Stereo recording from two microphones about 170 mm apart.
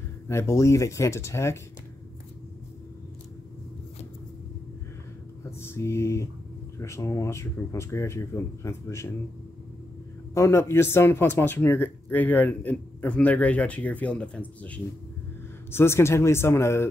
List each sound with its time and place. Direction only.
0.3 s speech: 15° left (ahead or behind)
5.4 s speech: 15° left (ahead or behind)
10.3 s speech: 15° left (ahead or behind)